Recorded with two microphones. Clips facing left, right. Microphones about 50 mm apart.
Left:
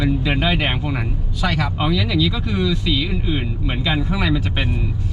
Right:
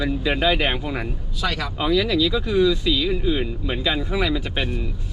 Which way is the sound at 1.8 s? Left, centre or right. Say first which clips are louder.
Right 3 dB; left.